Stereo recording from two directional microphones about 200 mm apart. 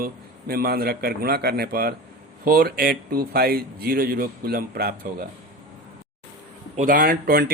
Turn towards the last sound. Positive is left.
turn(degrees=-45)  # may be behind; listen again after turning